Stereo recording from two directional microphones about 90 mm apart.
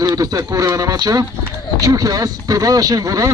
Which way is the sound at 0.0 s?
40° right (ahead or behind).